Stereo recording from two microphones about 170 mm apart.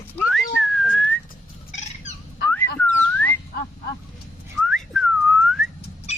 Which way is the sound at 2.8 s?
10° left (ahead or behind).